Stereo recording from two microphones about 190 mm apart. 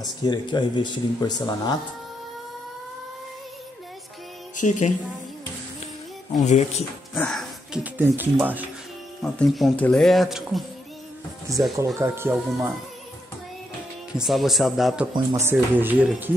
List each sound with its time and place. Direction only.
0.2 s speech: 25° left (ahead or behind)
4.6 s speech: 40° left (ahead or behind)
6.4 s speech: 35° left (ahead or behind)
7.2 s music: 5° left (ahead or behind)
7.8 s speech: 10° right (ahead or behind)
11.5 s speech: 15° right (ahead or behind)
14.1 s speech: centre (ahead or behind)
15.1 s speech: 15° right (ahead or behind)